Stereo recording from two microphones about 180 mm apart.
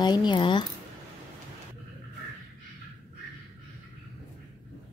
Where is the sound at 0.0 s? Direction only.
25° left (ahead or behind).